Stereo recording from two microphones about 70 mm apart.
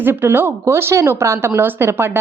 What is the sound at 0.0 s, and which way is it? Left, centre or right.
A woman's voice, right.